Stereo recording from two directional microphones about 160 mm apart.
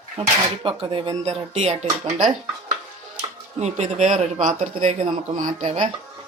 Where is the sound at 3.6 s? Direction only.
45° right (ahead or behind).